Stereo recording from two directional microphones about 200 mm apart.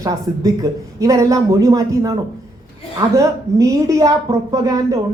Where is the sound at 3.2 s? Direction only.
15° right (ahead or behind).